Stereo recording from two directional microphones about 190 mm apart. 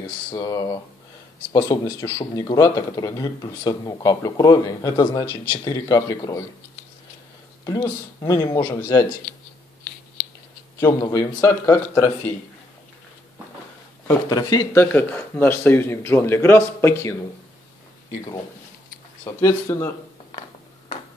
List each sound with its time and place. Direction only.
0.3 s speech: 20° left (ahead or behind)
7.6 s speech: 20° left (ahead or behind)
10.8 s speech: 15° left (ahead or behind)
14.0 s speech: 20° left (ahead or behind)
19.2 s speech: 15° left (ahead or behind)